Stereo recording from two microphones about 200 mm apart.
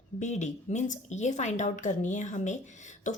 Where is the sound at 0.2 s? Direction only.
35° left (ahead or behind).